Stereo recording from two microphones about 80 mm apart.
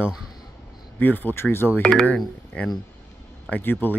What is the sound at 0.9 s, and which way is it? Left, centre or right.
Speech, left.